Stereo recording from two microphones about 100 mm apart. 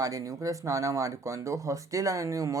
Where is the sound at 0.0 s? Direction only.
35° right (ahead or behind).